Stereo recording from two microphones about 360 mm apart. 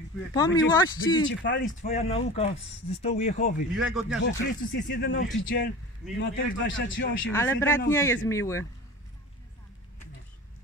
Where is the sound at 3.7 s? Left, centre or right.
Centre.